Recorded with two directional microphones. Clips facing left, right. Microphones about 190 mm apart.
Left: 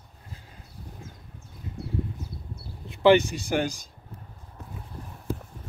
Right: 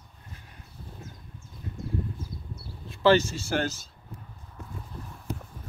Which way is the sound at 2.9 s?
15° left (ahead or behind).